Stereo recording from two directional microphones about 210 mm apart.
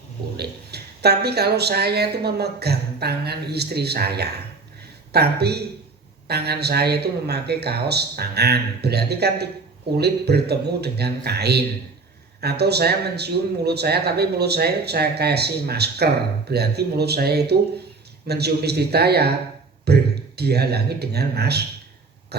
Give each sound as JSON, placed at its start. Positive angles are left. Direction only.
{"t": 0.3, "sound": "speech", "side_deg": -50}
{"t": 22.3, "sound": "throat clearing", "side_deg": -50}